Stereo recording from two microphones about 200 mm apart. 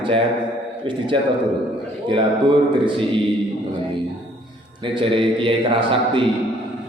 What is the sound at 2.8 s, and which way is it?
Speech, 25° right (ahead or behind).